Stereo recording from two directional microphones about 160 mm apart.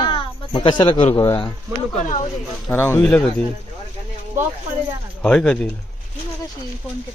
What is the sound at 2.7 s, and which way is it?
Speech, 15° left (ahead or behind).